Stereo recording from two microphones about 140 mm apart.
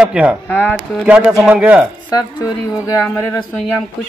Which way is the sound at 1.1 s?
5° right (ahead or behind).